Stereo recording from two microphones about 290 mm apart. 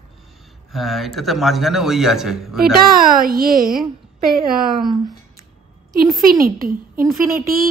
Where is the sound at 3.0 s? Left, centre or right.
Right.